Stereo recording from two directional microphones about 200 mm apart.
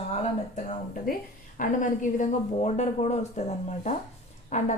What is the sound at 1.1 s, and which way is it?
A woman's voice, 45° left (ahead or behind).